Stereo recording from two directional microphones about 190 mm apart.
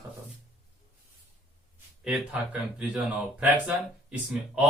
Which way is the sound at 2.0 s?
5° right (ahead or behind).